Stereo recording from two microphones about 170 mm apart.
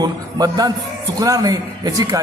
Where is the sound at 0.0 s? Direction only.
20° right (ahead or behind).